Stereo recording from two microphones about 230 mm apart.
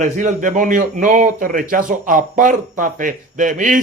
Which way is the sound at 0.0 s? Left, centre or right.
Right.